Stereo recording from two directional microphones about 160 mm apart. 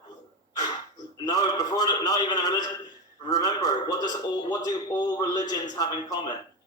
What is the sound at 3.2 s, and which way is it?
A man's voice, 25° left (ahead or behind).